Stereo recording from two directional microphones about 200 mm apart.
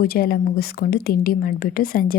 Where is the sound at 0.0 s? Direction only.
50° left (ahead or behind).